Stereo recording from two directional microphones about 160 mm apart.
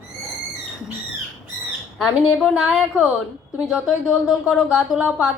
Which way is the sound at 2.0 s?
5° right (ahead or behind).